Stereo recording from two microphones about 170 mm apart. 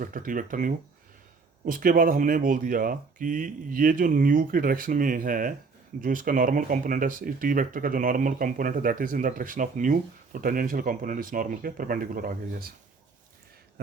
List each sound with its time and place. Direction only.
0.0 s speech: 50° right (ahead or behind)